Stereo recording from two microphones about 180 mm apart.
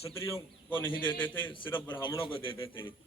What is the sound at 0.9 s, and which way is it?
A man's voice, 25° left (ahead or behind).